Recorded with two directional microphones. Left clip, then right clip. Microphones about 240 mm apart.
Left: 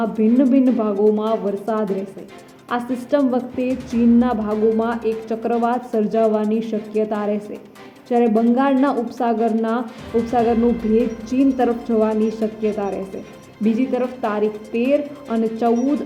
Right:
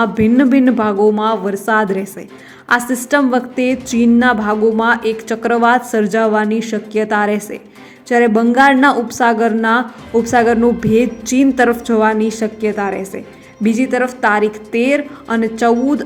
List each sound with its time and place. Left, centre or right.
0.0 s a woman's voice: centre